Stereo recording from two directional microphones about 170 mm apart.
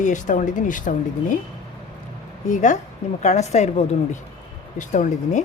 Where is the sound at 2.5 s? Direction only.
45° left (ahead or behind).